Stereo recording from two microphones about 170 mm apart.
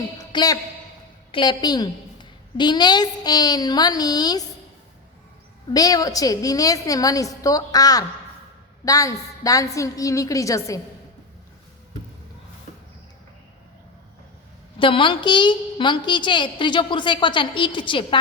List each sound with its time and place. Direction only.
0.2 s a sound: 20° left (ahead or behind)
1.3 s a woman's voice: 25° left (ahead or behind)
5.7 s a woman's voice: 20° left (ahead or behind)
14.8 s a woman's voice: 30° left (ahead or behind)